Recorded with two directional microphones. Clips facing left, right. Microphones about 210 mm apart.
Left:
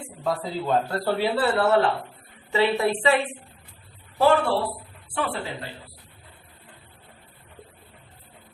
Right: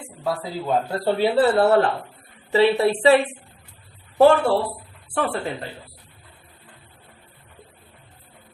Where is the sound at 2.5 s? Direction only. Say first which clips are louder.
Right 5 dB; 35° right (ahead or behind).